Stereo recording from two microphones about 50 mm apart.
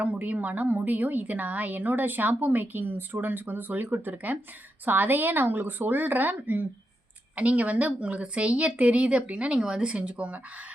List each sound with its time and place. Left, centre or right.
0.0 s a woman's voice: right